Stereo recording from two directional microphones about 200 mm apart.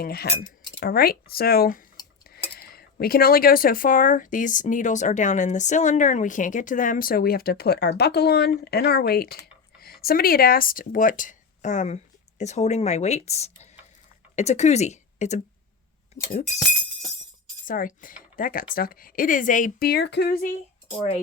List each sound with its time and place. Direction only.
0.0 s speech: 50° left (ahead or behind); by 15.4 s 35° left (ahead or behind)
17.7 s speech: 45° left (ahead or behind)